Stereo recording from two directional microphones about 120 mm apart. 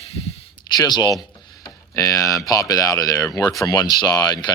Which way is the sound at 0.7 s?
35° left (ahead or behind).